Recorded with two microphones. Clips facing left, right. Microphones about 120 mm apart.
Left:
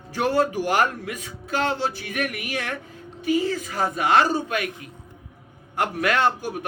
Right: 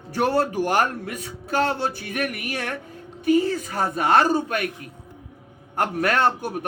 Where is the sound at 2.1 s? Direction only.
40° right (ahead or behind).